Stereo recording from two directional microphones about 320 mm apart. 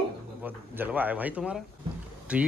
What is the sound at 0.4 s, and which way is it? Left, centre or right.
Speech, centre.